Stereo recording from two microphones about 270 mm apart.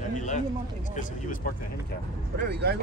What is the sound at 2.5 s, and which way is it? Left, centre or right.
Speech, right.